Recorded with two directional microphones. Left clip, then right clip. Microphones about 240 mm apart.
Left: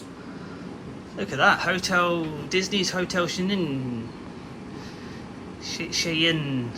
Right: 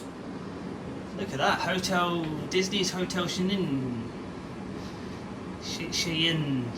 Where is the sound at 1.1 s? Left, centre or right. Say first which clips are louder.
Left 6 dB; centre.